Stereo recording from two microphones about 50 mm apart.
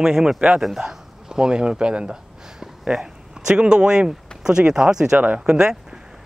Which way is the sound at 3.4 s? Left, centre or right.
Centre.